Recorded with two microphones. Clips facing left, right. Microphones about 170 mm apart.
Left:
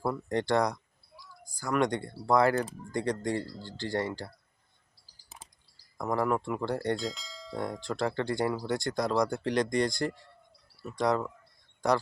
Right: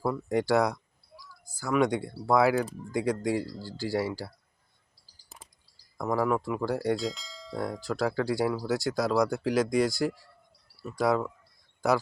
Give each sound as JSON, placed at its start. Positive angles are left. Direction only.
{"t": 0.0, "sound": "speech", "side_deg": -5}
{"t": 6.0, "sound": "bell", "side_deg": -5}